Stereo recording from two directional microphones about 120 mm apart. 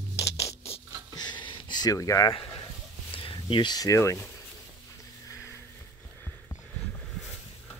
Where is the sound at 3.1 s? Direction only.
45° left (ahead or behind); by 4.3 s 25° left (ahead or behind).